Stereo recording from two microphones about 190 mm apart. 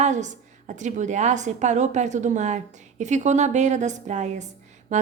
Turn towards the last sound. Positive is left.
turn(degrees=-40)  # may be behind; listen again after turning